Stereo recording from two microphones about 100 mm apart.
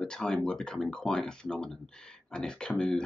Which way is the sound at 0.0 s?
5° left (ahead or behind).